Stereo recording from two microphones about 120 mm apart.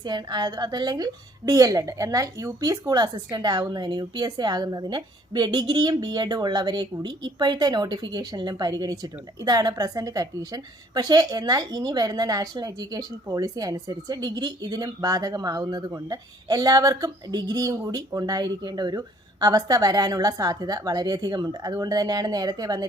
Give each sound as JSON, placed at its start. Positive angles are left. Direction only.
{"t": 0.0, "sound": "a woman's voice", "side_deg": -35}